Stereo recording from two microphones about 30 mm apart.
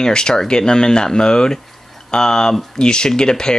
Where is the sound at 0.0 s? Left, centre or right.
Left.